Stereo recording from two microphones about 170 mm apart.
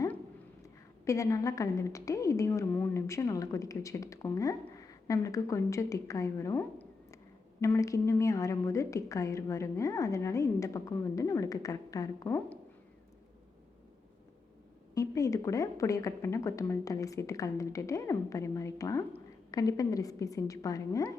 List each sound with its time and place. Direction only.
0.6 s a woman's voice: 20° left (ahead or behind)
14.9 s a woman's voice: 20° left (ahead or behind)